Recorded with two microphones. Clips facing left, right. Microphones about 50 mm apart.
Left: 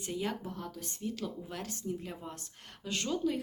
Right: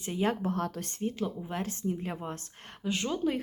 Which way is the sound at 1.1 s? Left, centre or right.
Right.